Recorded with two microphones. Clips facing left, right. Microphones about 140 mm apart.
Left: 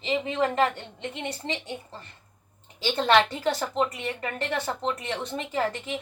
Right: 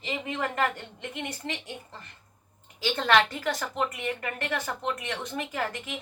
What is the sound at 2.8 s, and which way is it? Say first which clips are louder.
A woman's voice: left 2 dB; 25° left (ahead or behind).